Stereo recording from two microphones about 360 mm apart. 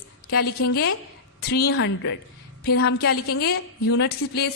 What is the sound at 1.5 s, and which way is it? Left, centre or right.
A woman's voice, left.